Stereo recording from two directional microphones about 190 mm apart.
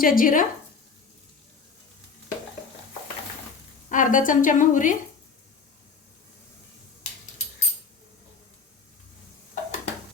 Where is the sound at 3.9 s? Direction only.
45° left (ahead or behind).